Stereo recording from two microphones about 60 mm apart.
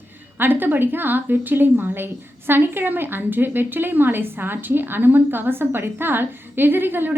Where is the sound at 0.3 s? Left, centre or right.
Right.